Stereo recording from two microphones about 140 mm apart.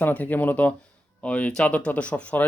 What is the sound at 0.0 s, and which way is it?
Speech, 10° left (ahead or behind).